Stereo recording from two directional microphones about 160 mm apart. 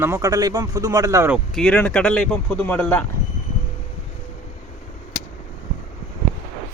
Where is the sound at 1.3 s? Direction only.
5° left (ahead or behind).